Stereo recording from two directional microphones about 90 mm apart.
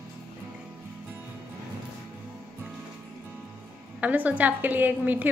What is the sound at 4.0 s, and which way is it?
A woman's voice, 15° right (ahead or behind).